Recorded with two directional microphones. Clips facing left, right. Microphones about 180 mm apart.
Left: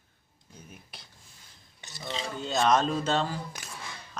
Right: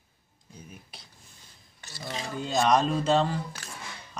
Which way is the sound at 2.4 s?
Centre (ahead or behind).